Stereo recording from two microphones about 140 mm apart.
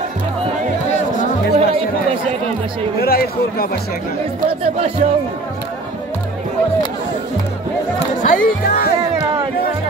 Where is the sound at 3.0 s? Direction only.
90° left.